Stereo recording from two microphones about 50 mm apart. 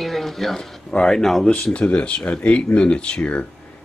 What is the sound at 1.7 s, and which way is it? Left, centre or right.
Speech, left.